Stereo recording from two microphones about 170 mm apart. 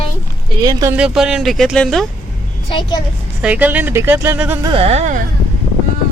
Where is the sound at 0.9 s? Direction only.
5° right (ahead or behind).